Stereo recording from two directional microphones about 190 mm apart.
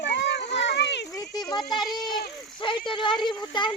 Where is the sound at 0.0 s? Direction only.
65° left (ahead or behind).